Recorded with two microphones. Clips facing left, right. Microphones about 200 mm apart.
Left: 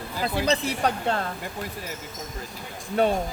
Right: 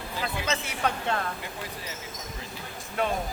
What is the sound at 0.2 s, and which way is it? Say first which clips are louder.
Speech: left 7 dB; 35° left (ahead or behind).